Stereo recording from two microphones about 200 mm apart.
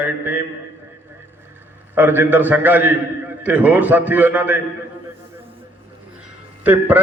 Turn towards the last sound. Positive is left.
turn(degrees=-10)  # may be behind; listen again after turning